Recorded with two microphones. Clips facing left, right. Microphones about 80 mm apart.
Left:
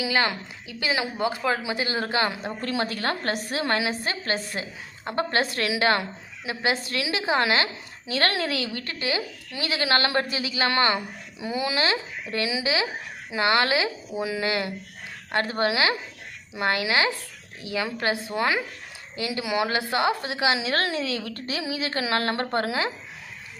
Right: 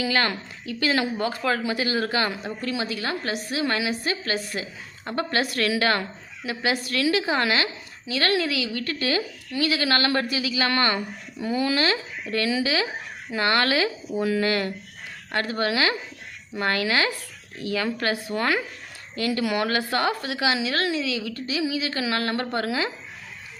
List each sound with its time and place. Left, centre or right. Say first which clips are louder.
0.0 s a woman's voice: even; centre
2.6 s a woman's voice: left 2 dB; left
10.9 s a woman's voice: right 1 dB; centre
15.3 s a woman's voice: left 1 dB; left